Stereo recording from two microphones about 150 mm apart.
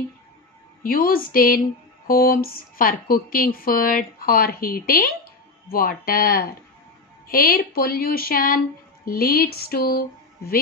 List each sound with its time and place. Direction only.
0.8 s speech: 75° left (ahead or behind)